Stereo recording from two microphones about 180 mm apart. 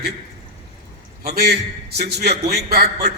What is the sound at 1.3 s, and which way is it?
Speech, 60° right (ahead or behind).